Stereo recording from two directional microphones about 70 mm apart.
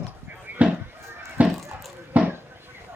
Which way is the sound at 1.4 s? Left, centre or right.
Right.